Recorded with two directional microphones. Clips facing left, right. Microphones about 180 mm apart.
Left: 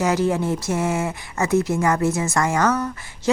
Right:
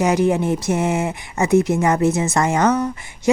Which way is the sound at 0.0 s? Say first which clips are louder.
Right 3 dB; 20° right (ahead or behind).